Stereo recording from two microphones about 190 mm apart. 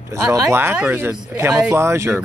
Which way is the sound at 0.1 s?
15° right (ahead or behind).